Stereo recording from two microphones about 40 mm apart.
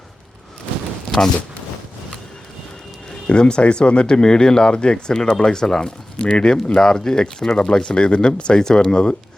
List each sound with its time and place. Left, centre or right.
3.2 s speech: left
7.5 s speech: left